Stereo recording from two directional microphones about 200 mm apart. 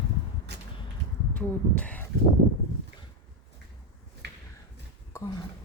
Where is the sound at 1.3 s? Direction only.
5° left (ahead or behind).